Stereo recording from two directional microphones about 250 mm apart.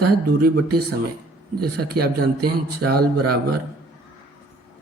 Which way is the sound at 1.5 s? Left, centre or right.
Right.